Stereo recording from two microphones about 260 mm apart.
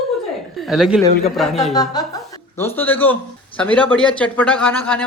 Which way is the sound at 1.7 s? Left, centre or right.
Centre.